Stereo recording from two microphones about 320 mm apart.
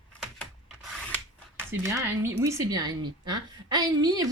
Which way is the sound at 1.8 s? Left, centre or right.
Centre.